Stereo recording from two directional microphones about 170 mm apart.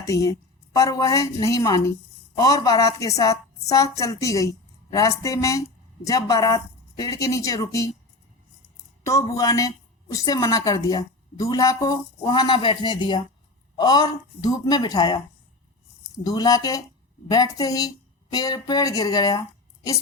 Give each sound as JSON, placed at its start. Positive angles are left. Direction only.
{"t": 0.0, "sound": "a woman's voice", "side_deg": 20}
{"t": 9.0, "sound": "a woman's voice", "side_deg": 20}
{"t": 16.2, "sound": "a woman's voice", "side_deg": 25}